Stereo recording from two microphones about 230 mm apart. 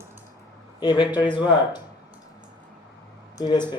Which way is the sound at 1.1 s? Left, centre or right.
Centre.